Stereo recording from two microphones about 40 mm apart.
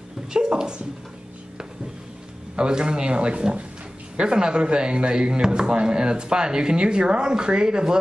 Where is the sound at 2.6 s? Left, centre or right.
Right.